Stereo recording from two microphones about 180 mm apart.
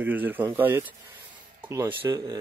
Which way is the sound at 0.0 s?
10° right (ahead or behind).